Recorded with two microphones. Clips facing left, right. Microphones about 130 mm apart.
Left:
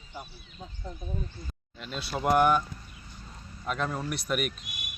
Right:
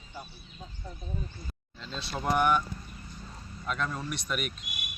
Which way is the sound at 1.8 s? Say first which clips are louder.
Left 4 dB; 10° left (ahead or behind).